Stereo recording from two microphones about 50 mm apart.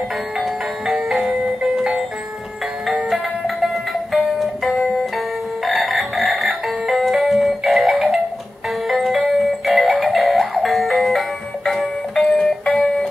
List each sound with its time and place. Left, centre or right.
0.4 s music: centre
3.1 s music: centre
5.7 s a sound: centre
7.0 s music: centre
12.2 s music: centre